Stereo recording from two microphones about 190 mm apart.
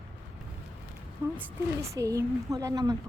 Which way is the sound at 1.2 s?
15° right (ahead or behind).